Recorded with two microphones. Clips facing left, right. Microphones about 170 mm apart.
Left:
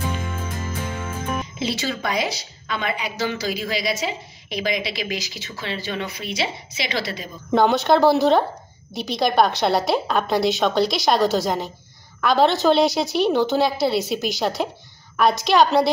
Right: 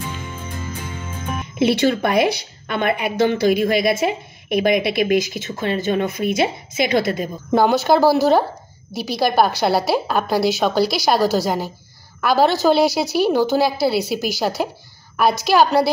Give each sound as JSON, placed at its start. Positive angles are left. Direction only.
{"t": 1.6, "sound": "a woman's voice", "side_deg": -60}
{"t": 7.5, "sound": "a woman's voice", "side_deg": -5}